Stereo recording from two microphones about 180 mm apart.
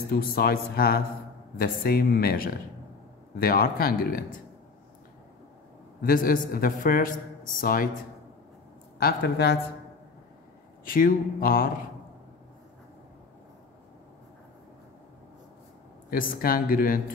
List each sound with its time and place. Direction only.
0.1 s a man's voice: 60° left (ahead or behind)
5.9 s a man's voice: 50° left (ahead or behind)
9.0 s a man's voice: 60° left (ahead or behind)
10.9 s a man's voice: 50° left (ahead or behind)
16.1 s a man's voice: 50° left (ahead or behind)